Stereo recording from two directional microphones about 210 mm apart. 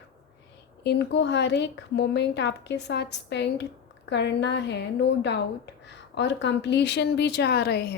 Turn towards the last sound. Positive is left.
turn(degrees=50)  # may be behind; listen again after turning